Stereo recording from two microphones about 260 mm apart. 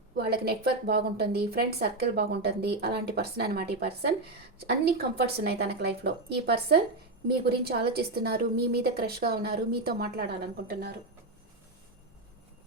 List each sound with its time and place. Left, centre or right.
0.3 s a woman's voice: right